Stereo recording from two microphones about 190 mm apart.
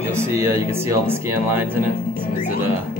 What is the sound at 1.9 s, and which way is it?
Music, 50° left (ahead or behind).